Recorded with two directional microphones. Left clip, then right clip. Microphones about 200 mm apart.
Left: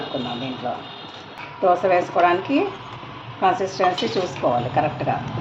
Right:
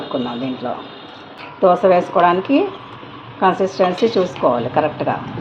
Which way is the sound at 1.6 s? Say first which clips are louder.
Right 5 dB; 40° right (ahead or behind).